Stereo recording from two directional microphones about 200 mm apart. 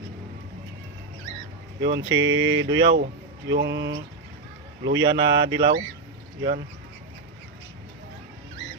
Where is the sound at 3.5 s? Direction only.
60° right (ahead or behind).